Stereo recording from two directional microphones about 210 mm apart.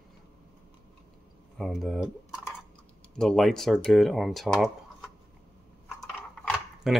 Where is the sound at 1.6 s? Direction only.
Centre (ahead or behind).